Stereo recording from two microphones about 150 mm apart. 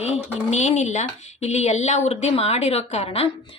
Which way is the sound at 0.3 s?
50° left (ahead or behind).